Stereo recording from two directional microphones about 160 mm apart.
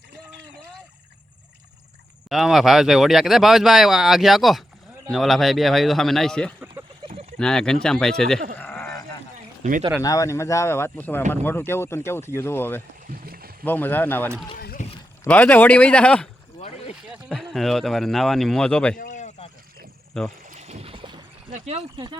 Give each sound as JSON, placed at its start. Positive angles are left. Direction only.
{"t": 2.3, "sound": "speech", "side_deg": 0}
{"t": 7.0, "sound": "a sound", "side_deg": -35}
{"t": 7.3, "sound": "speech", "side_deg": 5}
{"t": 8.5, "sound": "a sound", "side_deg": 15}
{"t": 10.0, "sound": "speech", "side_deg": 20}
{"t": 13.1, "sound": "rowboat", "side_deg": -70}
{"t": 13.7, "sound": "speech", "side_deg": 10}
{"t": 14.8, "sound": "a sound", "side_deg": 50}
{"t": 15.3, "sound": "speech", "side_deg": 10}
{"t": 18.9, "sound": "a sound", "side_deg": 55}
{"t": 20.1, "sound": "speech", "side_deg": 5}
{"t": 20.5, "sound": "boat", "side_deg": -45}
{"t": 21.5, "sound": "speech", "side_deg": -40}